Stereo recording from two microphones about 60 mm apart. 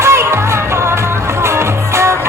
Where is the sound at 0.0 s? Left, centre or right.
Right.